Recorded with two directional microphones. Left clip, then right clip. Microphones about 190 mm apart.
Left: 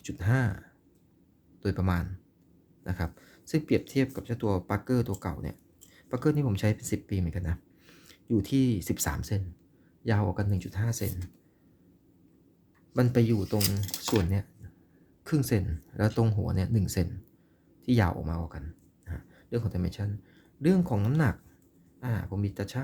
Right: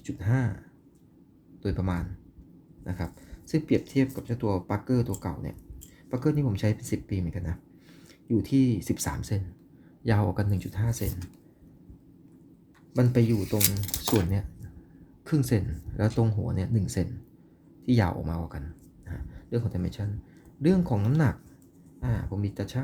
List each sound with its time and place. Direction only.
0.0 s speech: 20° left (ahead or behind)
1.6 s a man's voice: 20° left (ahead or behind)
10.0 s speech: 5° left (ahead or behind)
12.9 s speech: 15° left (ahead or behind)
14.2 s speech: 5° left (ahead or behind)